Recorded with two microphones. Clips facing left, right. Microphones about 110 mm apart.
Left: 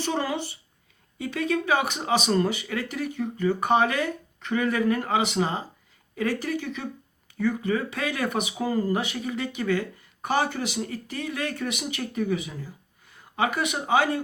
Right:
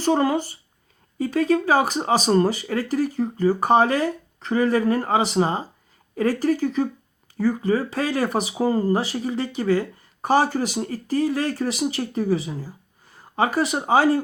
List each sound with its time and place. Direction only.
0.0 s speech: 40° right (ahead or behind)